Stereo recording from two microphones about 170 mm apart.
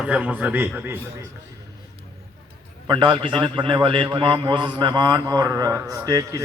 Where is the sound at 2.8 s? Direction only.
30° right (ahead or behind).